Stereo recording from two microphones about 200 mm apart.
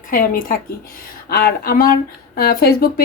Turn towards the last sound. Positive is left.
turn(degrees=50)  # may be behind; listen again after turning